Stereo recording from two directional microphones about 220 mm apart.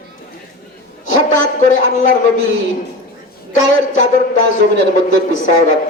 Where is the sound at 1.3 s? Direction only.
35° left (ahead or behind).